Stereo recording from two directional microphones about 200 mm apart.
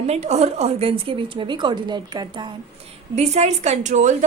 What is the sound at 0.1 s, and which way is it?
A woman's voice, 35° right (ahead or behind).